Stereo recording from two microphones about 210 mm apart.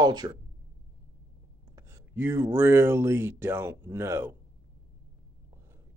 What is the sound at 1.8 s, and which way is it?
Speech, 15° right (ahead or behind).